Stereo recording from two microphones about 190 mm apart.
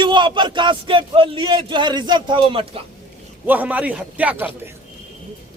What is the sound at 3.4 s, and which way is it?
A man's voice, 10° right (ahead or behind).